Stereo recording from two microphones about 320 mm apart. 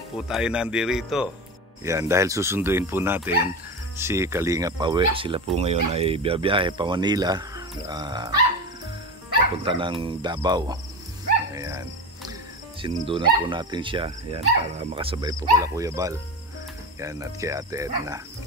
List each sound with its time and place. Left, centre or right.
0.3 s speech: centre
9.7 s speech: centre
11.5 s dog: centre
12.8 s speech: centre